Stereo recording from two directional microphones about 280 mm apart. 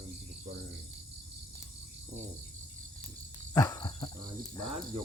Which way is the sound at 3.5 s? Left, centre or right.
Centre.